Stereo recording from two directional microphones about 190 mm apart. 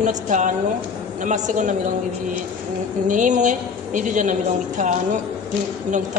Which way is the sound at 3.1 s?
40° right (ahead or behind).